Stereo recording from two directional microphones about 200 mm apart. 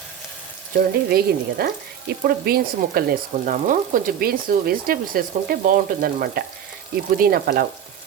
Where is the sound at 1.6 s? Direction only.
50° right (ahead or behind).